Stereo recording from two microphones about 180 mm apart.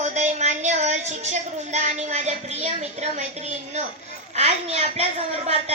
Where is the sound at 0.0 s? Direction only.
40° right (ahead or behind).